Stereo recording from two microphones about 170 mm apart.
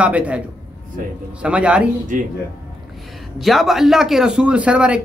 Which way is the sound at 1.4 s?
5° right (ahead or behind).